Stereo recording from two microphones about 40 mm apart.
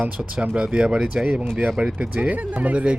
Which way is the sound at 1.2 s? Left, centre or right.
Right.